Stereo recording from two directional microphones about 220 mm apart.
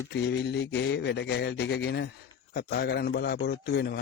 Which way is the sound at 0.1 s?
50° left (ahead or behind).